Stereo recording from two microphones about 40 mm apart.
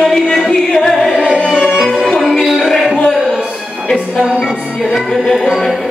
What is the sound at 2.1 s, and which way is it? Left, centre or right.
Music, centre.